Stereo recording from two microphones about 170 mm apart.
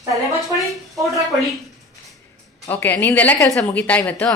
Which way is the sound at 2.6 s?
10° left (ahead or behind).